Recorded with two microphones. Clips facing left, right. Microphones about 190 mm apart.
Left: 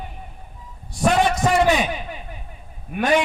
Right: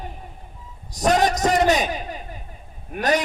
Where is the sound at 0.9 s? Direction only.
40° right (ahead or behind).